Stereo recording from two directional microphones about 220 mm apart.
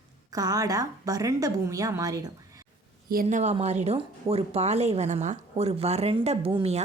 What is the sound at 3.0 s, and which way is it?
Speech, 40° right (ahead or behind).